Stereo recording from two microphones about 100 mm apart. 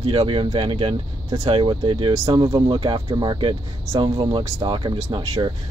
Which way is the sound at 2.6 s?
60° right (ahead or behind).